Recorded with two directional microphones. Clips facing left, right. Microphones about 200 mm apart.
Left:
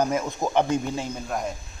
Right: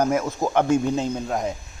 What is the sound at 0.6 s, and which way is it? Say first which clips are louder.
Speech: right 5 dB; 20° right (ahead or behind).